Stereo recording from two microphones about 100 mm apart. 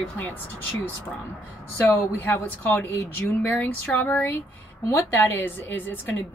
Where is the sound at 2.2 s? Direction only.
20° left (ahead or behind).